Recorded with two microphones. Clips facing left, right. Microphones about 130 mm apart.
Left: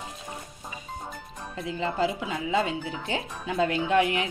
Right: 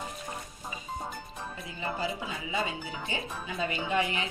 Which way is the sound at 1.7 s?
90° left.